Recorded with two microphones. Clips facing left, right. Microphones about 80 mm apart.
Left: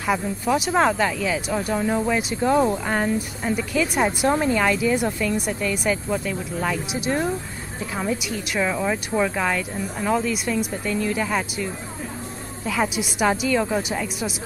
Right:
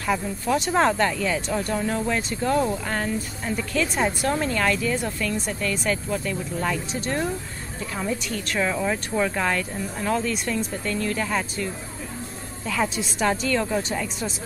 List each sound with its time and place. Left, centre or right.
0.0 s speech: centre